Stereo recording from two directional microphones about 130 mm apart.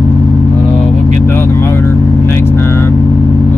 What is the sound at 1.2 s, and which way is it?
Vehicle, 20° left (ahead or behind).